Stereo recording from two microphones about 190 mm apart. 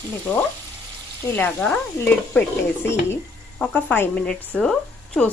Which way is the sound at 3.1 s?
5° left (ahead or behind).